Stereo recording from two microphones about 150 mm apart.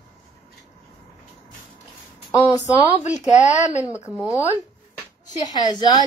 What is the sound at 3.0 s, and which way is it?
Speech, 50° left (ahead or behind).